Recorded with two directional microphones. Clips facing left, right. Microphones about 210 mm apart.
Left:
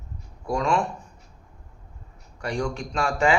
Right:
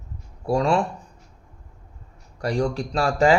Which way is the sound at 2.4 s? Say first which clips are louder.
Right 4 dB; 35° right (ahead or behind).